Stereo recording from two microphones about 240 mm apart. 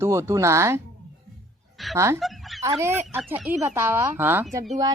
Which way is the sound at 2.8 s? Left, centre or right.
Centre.